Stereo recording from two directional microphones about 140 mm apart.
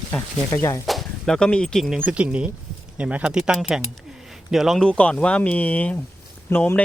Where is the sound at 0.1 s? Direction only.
20° left (ahead or behind).